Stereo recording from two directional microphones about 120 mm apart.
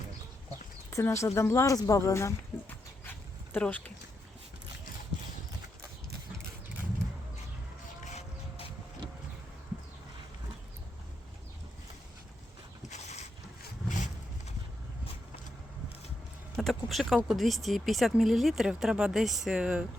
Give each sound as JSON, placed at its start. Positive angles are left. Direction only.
{"t": 0.9, "sound": "speech", "side_deg": 25}
{"t": 3.0, "sound": "dog", "side_deg": 15}
{"t": 8.0, "sound": "a sound", "side_deg": 70}
{"t": 12.9, "sound": "a sound", "side_deg": 70}
{"t": 13.8, "sound": "vehicle", "side_deg": 90}
{"t": 16.6, "sound": "speech", "side_deg": 0}